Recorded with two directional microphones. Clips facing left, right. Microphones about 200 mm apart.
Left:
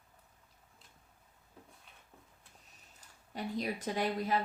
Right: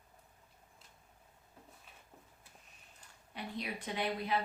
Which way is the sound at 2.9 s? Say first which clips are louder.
Left 5 dB; 40° left (ahead or behind).